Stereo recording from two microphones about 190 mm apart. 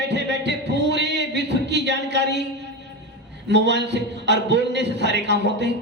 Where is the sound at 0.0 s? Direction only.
65° right (ahead or behind).